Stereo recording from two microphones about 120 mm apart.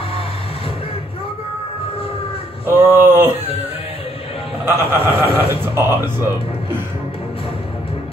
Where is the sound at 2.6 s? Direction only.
20° right (ahead or behind).